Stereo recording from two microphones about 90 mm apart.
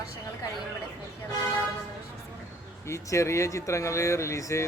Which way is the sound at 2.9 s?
30° left (ahead or behind).